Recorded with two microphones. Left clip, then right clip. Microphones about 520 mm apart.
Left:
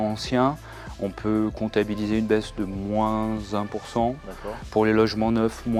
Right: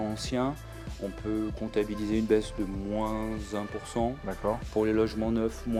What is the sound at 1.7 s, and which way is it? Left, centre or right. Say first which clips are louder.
Speech: left 4 dB; left.